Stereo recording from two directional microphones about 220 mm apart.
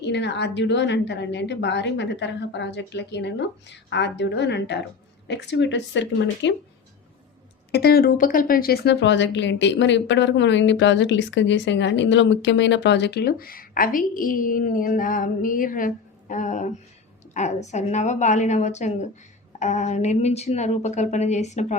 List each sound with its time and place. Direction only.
0.0 s speech: 50° left (ahead or behind)
7.7 s a woman's voice: 45° left (ahead or behind); by 21.8 s 30° left (ahead or behind)